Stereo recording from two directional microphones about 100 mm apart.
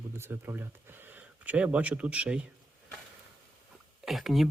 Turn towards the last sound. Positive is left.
turn(degrees=0)  # may be behind; listen again after turning